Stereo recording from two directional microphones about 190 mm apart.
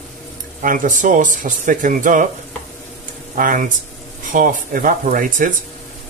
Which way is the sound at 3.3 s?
45° right (ahead or behind).